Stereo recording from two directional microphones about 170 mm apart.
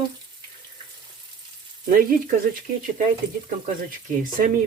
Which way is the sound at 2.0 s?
55° right (ahead or behind).